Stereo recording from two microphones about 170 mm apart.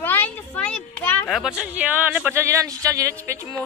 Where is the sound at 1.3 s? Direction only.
5° right (ahead or behind).